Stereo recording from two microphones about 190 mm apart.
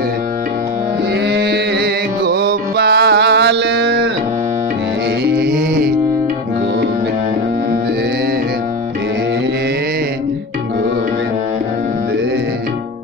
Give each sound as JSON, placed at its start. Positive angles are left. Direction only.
{"t": 1.2, "sound": "music", "side_deg": -60}
{"t": 5.2, "sound": "music", "side_deg": -55}